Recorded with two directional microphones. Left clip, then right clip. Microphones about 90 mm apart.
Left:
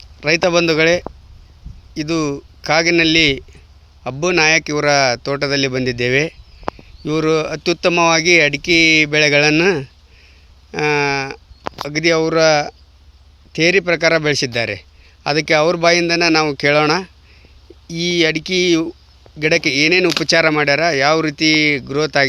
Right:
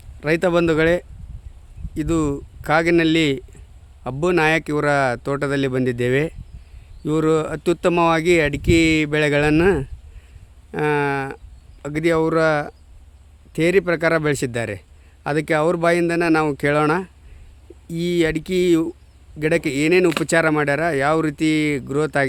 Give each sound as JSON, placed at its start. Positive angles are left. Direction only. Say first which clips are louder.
{"t": 0.2, "sound": "a man's voice", "louder": "left 4 dB", "side_deg": -35}